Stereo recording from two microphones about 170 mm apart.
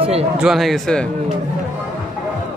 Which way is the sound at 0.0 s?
35° right (ahead or behind).